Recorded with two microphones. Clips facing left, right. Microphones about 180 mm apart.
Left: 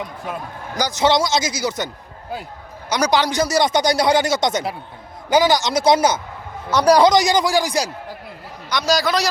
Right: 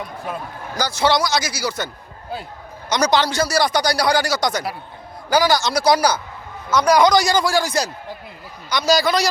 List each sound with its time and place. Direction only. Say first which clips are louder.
0.8 s speech: left 1 dB; 20° left (ahead or behind)
2.9 s speech: even; 10° left (ahead or behind)
6.7 s a man's voice: left 2 dB; 35° left (ahead or behind)
7.1 s a man's voice: left 1 dB; 20° left (ahead or behind)
8.7 s a man's voice: right 1 dB; centre (ahead or behind)